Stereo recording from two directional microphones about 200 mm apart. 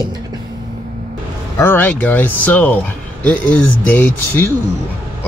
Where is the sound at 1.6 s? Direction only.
10° left (ahead or behind).